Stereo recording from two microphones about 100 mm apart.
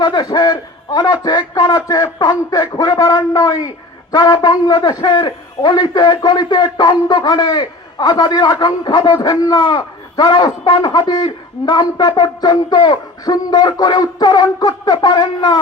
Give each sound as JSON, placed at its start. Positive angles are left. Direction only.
{"t": 0.0, "sound": "a man's voice", "side_deg": 45}